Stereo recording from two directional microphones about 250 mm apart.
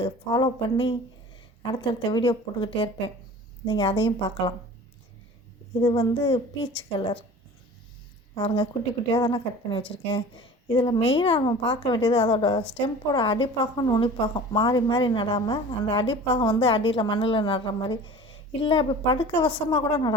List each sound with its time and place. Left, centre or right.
0.0 s a woman's voice: centre
5.8 s a woman's voice: centre
8.4 s a woman's voice: left